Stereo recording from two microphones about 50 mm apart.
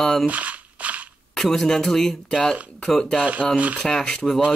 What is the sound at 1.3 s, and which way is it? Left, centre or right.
Speech, centre.